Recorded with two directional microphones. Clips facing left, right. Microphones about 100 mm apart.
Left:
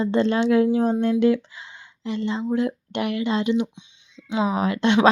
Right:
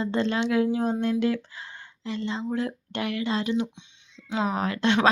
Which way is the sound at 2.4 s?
25° left (ahead or behind).